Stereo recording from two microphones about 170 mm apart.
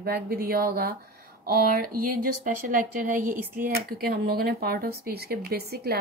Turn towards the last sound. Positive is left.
turn(degrees=-70)  # may be behind; listen again after turning